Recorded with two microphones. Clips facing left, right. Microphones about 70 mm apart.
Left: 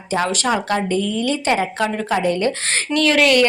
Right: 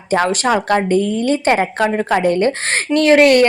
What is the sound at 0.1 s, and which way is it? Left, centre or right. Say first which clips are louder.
A woman's voice: right 4 dB; right.